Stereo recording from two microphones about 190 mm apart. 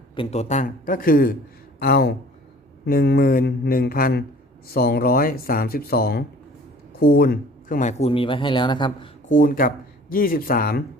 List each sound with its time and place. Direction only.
0.2 s a man's voice: 35° left (ahead or behind)
9.3 s speech: 45° left (ahead or behind)